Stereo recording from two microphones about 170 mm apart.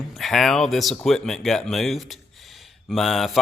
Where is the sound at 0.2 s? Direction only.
Centre (ahead or behind).